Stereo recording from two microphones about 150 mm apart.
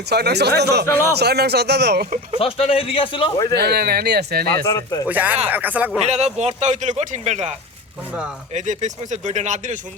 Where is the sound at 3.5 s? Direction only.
90° right.